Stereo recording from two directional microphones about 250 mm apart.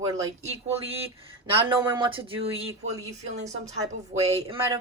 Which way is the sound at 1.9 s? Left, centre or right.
Centre.